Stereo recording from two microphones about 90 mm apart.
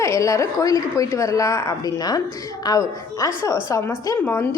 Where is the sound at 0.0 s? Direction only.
35° left (ahead or behind).